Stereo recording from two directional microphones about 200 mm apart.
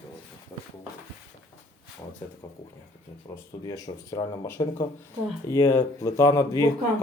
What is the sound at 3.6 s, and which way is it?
Speech, 20° left (ahead or behind).